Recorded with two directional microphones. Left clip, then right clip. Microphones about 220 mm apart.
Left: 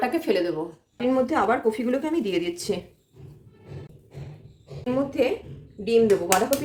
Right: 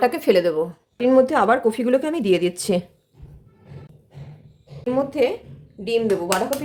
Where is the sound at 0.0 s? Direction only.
50° right (ahead or behind).